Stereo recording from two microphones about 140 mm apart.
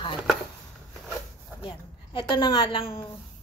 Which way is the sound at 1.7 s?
35° left (ahead or behind).